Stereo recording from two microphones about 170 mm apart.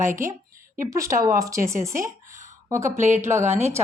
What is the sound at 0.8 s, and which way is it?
Speech, 15° right (ahead or behind).